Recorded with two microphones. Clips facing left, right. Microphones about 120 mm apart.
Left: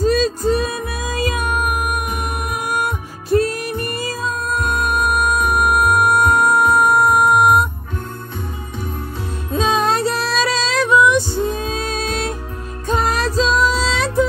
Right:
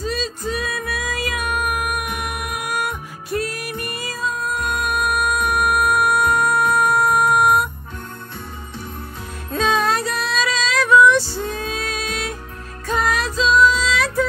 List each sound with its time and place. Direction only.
0.0 s music: 45° left (ahead or behind)
0.6 s music: 25° left (ahead or behind)
9.5 s music: 20° left (ahead or behind)